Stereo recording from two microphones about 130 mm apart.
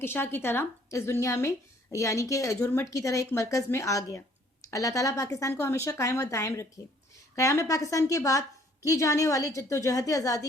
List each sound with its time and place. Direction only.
0.0 s a woman's voice: 15° left (ahead or behind)